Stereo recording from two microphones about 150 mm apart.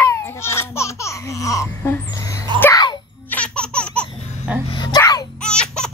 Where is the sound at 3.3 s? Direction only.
5° left (ahead or behind).